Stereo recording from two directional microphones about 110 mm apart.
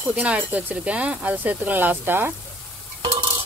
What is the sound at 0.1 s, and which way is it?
Speech, 10° right (ahead or behind).